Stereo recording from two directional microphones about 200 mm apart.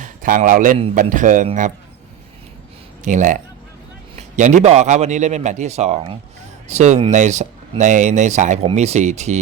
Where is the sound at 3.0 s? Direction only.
40° right (ahead or behind).